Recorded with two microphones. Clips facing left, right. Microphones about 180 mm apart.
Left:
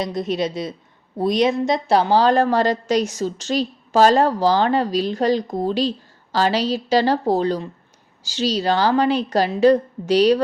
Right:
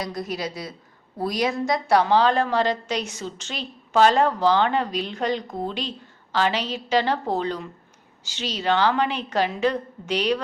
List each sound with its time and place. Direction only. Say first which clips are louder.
0.0 s a woman's voice: left 7 dB; 25° left (ahead or behind)